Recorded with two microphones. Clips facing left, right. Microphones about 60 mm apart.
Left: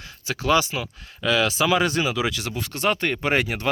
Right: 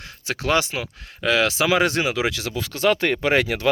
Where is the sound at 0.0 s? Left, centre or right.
Right.